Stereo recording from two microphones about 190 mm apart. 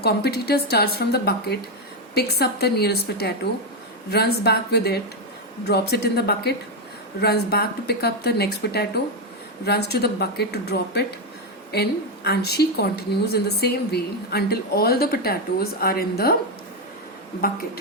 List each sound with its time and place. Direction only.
0.0 s a woman's voice: 55° left (ahead or behind)